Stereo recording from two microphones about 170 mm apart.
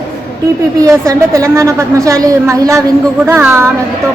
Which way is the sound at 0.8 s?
20° right (ahead or behind).